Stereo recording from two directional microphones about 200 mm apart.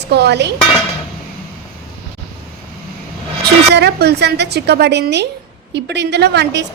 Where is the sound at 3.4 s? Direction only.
55° right (ahead or behind).